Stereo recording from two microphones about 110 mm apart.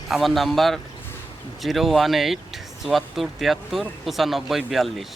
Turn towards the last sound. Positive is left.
turn(degrees=0)  # may be behind; listen again after turning